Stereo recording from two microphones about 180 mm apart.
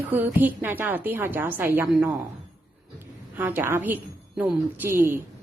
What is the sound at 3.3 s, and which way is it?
A woman's voice, 10° right (ahead or behind).